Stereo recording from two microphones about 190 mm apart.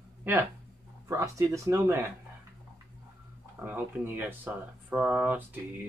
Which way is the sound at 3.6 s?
10° right (ahead or behind).